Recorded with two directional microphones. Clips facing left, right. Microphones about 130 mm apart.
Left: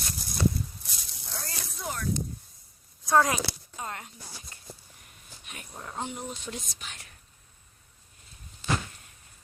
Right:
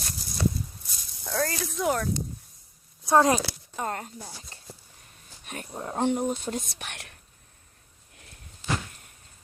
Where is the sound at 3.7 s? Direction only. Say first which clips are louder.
Right 6 dB; 45° right (ahead or behind).